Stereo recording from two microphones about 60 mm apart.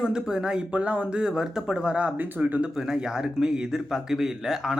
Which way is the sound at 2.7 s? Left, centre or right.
Centre.